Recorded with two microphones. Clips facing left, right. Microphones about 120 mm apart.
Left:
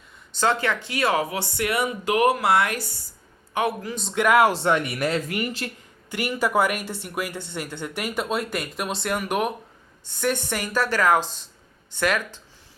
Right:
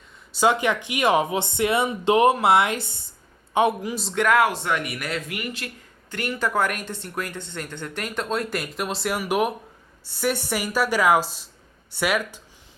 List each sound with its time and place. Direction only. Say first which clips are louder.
0.3 s a woman's voice: right 2 dB; 15° right (ahead or behind)
4.0 s speech: left 1 dB; 5° left (ahead or behind)
4.4 s speech: left 4 dB; 30° left (ahead or behind)
6.1 s a woman's voice: left 2 dB; 10° left (ahead or behind); by 12.4 s 10° right (ahead or behind)